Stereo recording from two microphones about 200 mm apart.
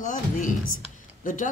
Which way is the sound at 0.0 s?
40° left (ahead or behind).